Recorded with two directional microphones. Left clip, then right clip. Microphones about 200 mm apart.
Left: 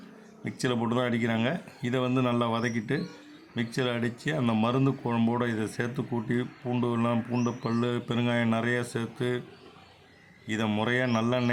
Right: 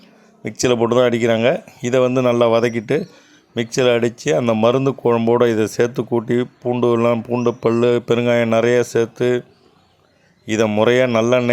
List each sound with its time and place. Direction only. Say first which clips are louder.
0.4 s speech: right 13 dB; 35° right (ahead or behind)
10.4 s a man's voice: right 14 dB; 35° right (ahead or behind)